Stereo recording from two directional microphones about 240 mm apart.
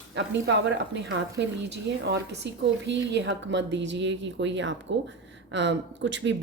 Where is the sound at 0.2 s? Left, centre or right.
Right.